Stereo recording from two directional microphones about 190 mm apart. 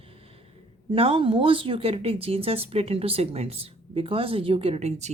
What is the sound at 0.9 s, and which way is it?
Speech, 30° right (ahead or behind).